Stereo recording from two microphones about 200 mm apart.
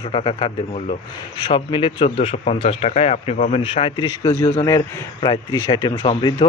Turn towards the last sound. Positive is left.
turn(degrees=20)  # may be behind; listen again after turning